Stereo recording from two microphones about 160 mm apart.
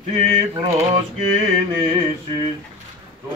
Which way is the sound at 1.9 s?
35° right (ahead or behind).